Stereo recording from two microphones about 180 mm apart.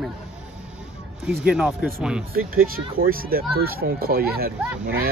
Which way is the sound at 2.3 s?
55° right (ahead or behind).